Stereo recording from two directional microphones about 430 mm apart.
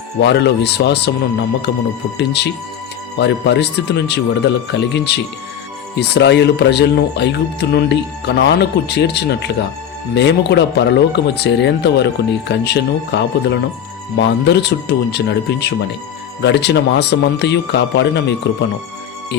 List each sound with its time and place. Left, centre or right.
0.2 s speech: left